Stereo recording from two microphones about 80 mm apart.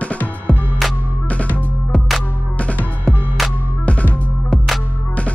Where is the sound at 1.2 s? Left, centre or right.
Centre.